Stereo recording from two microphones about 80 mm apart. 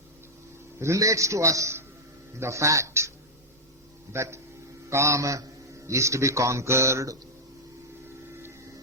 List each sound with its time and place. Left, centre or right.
0.8 s a man's voice: right
4.1 s a man's voice: right